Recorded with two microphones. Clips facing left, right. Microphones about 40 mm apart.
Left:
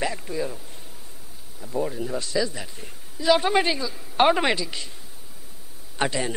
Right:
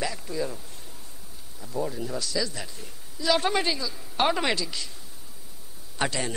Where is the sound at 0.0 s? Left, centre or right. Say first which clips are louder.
Left 2 dB; left.